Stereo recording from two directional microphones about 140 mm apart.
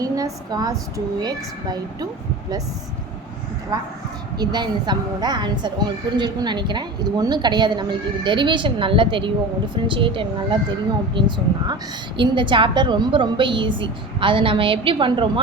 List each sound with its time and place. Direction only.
0.0 s a woman's voice: 25° right (ahead or behind)
3.7 s a woman's voice: 25° right (ahead or behind)